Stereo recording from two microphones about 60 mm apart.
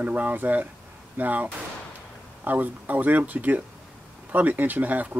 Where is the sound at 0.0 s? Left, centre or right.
Right.